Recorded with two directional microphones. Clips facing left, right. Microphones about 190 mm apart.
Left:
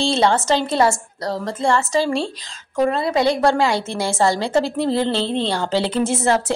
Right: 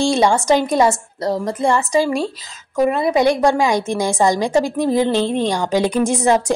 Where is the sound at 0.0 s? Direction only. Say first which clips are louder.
Right 2 dB; 15° right (ahead or behind).